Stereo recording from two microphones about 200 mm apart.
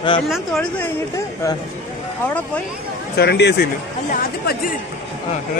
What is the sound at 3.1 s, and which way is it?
Speech, 55° left (ahead or behind).